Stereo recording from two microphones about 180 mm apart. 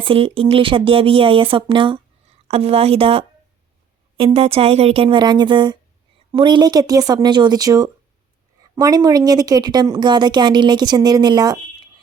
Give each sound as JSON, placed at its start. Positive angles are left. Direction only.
{"t": 0.0, "sound": "a woman's voice", "side_deg": -30}